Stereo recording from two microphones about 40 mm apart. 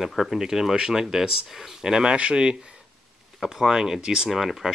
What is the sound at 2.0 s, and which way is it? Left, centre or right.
Speech, right.